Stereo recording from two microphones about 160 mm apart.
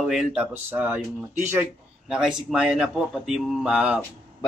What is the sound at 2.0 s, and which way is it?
A man's voice, centre (ahead or behind).